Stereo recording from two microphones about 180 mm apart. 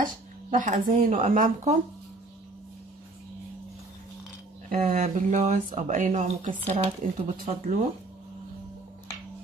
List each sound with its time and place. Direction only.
0.0 s speech: 45° right (ahead or behind)
4.7 s speech: 35° right (ahead or behind)
7.0 s speech: 50° right (ahead or behind)